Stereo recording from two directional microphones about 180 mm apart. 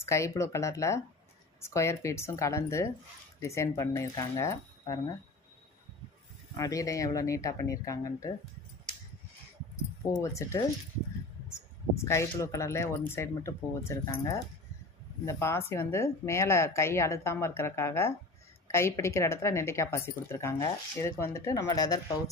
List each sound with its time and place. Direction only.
0.0 s speech: 15° left (ahead or behind)
6.6 s speech: 20° left (ahead or behind)
10.1 s speech: 15° left (ahead or behind)
12.0 s speech: 15° left (ahead or behind)